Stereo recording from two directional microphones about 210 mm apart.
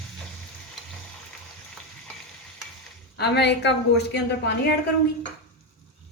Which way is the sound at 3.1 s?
50° left (ahead or behind).